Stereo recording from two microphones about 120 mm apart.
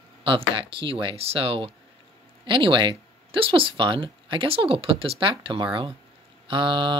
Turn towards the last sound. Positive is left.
turn(degrees=-45)  # may be behind; listen again after turning